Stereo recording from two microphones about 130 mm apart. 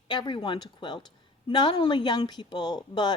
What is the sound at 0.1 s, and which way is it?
A woman's voice, 35° left (ahead or behind).